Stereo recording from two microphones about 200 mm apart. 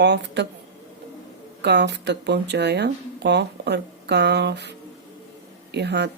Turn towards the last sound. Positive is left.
turn(degrees=-55)  # may be behind; listen again after turning